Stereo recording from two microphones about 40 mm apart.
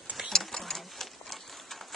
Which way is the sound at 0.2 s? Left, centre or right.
Centre.